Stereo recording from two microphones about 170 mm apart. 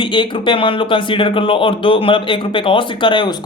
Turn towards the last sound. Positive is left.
turn(degrees=25)  # may be behind; listen again after turning